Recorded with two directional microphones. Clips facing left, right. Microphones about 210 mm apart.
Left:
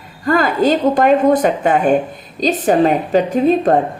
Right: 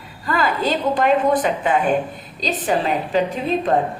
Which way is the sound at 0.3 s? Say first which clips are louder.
Left 7 dB; 45° left (ahead or behind).